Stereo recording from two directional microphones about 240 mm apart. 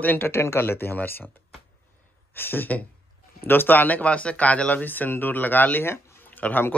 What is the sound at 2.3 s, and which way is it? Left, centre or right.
Speech, centre.